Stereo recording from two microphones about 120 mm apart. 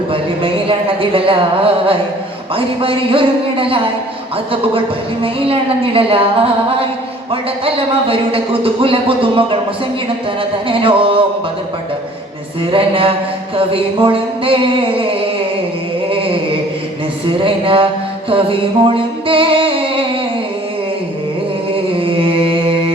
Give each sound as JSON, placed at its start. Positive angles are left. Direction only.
{"t": 1.1, "sound": "a man's voice", "side_deg": -50}
{"t": 5.2, "sound": "a man's voice", "side_deg": -50}
{"t": 10.7, "sound": "a man's voice", "side_deg": -50}
{"t": 12.7, "sound": "a man's voice", "side_deg": -50}
{"t": 17.2, "sound": "a man's voice", "side_deg": -50}
{"t": 18.3, "sound": "music", "side_deg": -50}
{"t": 22.0, "sound": "mantra", "side_deg": -50}